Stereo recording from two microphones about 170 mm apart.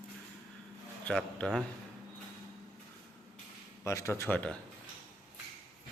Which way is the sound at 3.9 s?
15° left (ahead or behind).